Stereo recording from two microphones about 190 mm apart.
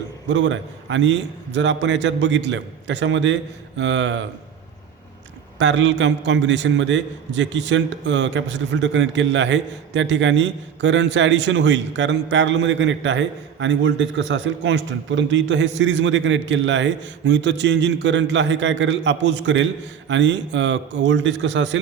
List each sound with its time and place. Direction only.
0.3 s a man's voice: 70° right (ahead or behind)
5.5 s a man's voice: 70° right (ahead or behind)